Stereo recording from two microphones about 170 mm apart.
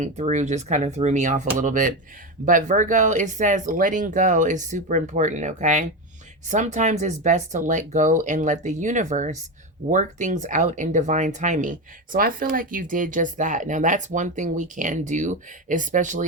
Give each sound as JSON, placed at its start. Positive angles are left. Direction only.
{"t": 0.0, "sound": "speech", "side_deg": -45}